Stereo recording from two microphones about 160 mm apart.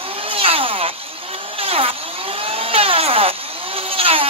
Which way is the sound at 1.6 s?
35° right (ahead or behind).